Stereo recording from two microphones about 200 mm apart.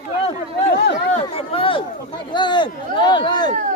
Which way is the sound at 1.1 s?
30° left (ahead or behind).